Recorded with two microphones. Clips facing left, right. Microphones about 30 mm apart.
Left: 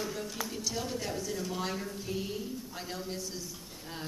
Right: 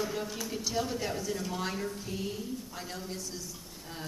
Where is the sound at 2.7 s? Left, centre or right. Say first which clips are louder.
Left 1 dB; centre.